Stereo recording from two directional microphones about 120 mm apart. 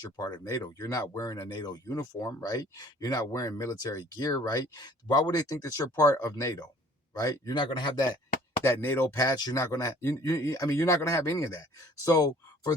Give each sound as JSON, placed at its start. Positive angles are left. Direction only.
{"t": 0.0, "sound": "speech", "side_deg": 35}
{"t": 8.6, "sound": "speech", "side_deg": 20}